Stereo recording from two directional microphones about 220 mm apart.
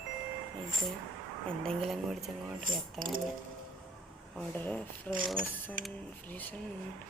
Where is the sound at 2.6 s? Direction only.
40° right (ahead or behind).